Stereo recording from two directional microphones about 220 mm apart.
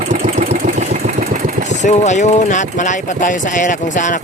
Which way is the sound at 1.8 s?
35° left (ahead or behind).